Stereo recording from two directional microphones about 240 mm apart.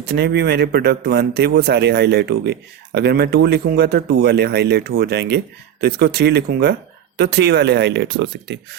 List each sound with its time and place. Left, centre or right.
0.1 s speech: right